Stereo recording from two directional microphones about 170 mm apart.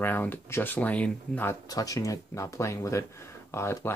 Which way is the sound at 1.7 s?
20° left (ahead or behind).